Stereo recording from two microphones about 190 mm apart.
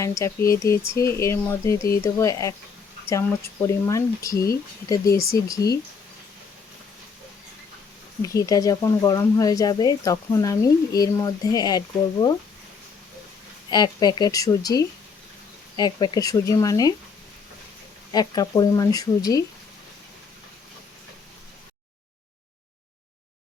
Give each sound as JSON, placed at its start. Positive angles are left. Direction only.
{"t": 0.0, "sound": "speech", "side_deg": 15}
{"t": 8.2, "sound": "speech", "side_deg": 20}
{"t": 13.7, "sound": "speech", "side_deg": 20}
{"t": 18.1, "sound": "speech", "side_deg": 20}